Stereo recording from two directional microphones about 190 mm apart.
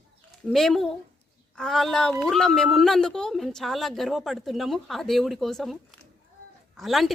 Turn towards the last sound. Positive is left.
turn(degrees=0)  # may be behind; listen again after turning